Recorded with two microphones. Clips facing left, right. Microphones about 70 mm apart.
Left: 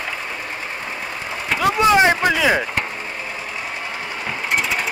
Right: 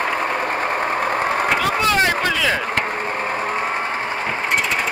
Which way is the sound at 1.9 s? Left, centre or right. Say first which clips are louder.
Left 6 dB; centre.